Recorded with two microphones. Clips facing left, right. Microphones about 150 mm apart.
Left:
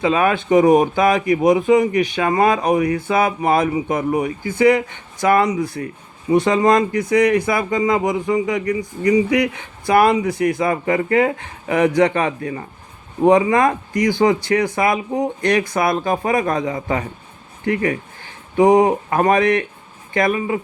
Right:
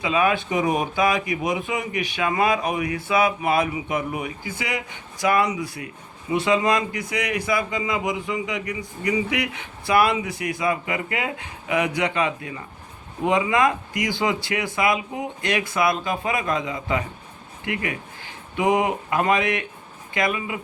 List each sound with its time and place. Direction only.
0.0 s speech: 50° left (ahead or behind)
18.5 s speech: 40° left (ahead or behind)